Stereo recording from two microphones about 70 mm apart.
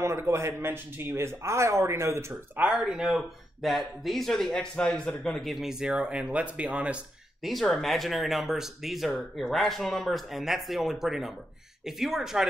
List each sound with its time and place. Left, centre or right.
0.0 s speech: right
2.5 s speech: right
2.8 s speech: centre
7.4 s speech: centre